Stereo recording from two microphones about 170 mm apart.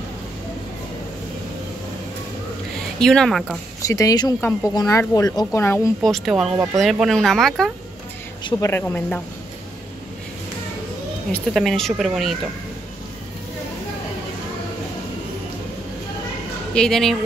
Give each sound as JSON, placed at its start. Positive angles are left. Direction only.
{"t": 3.0, "sound": "speech", "side_deg": 5}
{"t": 3.8, "sound": "speech", "side_deg": 20}
{"t": 6.0, "sound": "speech", "side_deg": 0}
{"t": 8.5, "sound": "speech", "side_deg": 15}
{"t": 11.3, "sound": "speech", "side_deg": 0}
{"t": 16.7, "sound": "speech", "side_deg": 5}